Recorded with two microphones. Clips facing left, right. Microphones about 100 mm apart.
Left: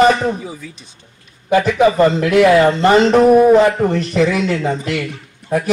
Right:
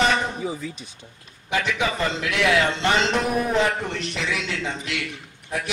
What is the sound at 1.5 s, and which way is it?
A man's voice, 45° left (ahead or behind).